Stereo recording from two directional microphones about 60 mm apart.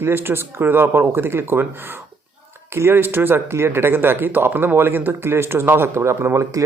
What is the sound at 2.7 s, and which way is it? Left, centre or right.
Speech, right.